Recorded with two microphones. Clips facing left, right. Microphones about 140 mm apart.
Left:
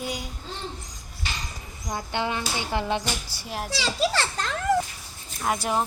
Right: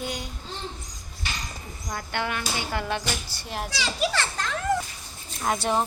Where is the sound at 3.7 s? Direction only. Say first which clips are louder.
Left 2 dB; 30° left (ahead or behind).